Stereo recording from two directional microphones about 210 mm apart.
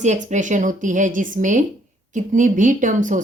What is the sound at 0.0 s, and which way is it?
A woman's voice, 35° right (ahead or behind).